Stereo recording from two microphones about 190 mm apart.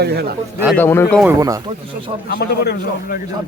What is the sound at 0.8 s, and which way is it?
Speech, 10° left (ahead or behind).